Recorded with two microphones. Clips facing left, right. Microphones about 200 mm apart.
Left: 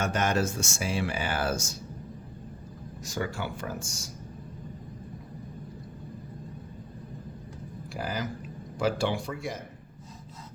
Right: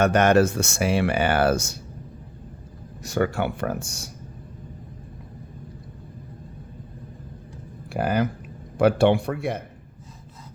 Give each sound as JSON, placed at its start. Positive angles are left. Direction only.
{"t": 0.0, "sound": "speech", "side_deg": -65}
{"t": 3.0, "sound": "speech", "side_deg": -65}
{"t": 7.9, "sound": "speech", "side_deg": -60}